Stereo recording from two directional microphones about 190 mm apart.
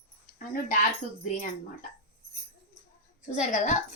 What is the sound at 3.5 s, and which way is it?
Speech, 40° left (ahead or behind).